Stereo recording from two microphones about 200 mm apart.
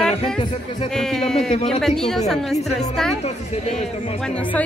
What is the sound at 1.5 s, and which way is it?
Speech, 30° left (ahead or behind).